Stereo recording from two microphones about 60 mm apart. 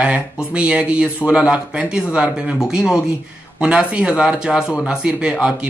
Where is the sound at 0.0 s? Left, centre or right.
Right.